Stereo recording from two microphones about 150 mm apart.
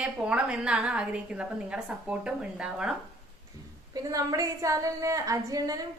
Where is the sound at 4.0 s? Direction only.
25° right (ahead or behind).